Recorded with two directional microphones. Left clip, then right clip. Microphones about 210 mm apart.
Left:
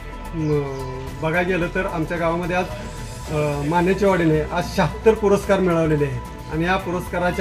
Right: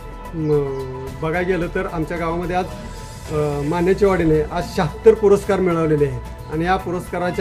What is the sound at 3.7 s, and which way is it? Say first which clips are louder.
Speech: right 1 dB; 15° right (ahead or behind).